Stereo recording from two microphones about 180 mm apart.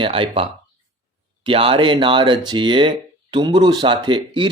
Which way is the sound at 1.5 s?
30° right (ahead or behind).